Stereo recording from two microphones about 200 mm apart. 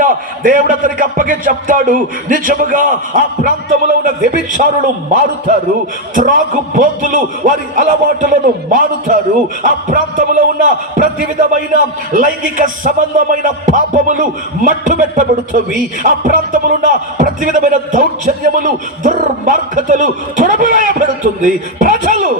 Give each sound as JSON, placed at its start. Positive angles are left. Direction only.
{"t": 0.0, "sound": "a man's voice", "side_deg": -40}